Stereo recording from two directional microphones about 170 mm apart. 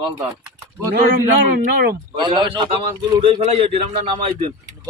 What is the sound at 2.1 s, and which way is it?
A man's voice, 25° right (ahead or behind).